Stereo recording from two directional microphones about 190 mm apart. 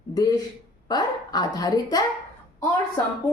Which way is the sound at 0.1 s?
20° left (ahead or behind).